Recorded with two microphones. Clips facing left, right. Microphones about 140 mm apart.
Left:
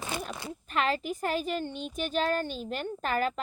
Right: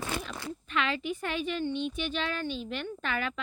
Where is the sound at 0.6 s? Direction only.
40° left (ahead or behind).